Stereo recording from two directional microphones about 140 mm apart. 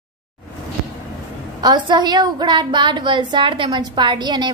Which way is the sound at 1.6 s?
30° right (ahead or behind).